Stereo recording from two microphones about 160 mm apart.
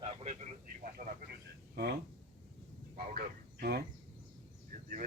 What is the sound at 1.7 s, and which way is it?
Speech, 80° right.